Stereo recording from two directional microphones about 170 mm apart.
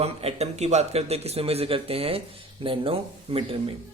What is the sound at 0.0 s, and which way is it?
A man's voice, 35° right (ahead or behind).